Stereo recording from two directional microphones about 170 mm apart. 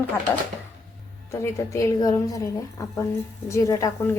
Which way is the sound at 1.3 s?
20° left (ahead or behind).